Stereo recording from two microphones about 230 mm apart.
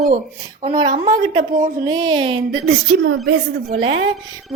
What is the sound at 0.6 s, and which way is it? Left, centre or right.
A woman's voice, right.